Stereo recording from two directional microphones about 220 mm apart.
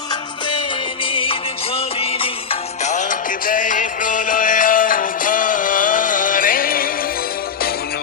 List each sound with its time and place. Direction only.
1.1 s music: 25° left (ahead or behind); by 6.9 s 40° left (ahead or behind)